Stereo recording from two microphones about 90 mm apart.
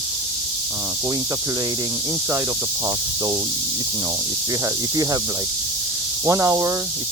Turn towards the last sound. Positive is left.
turn(degrees=-40)  # may be behind; listen again after turning